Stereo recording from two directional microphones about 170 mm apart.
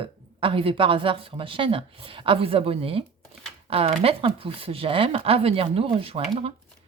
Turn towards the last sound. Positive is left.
turn(degrees=-35)  # may be behind; listen again after turning